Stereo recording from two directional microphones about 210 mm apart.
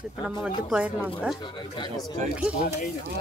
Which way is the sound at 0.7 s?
5° right (ahead or behind).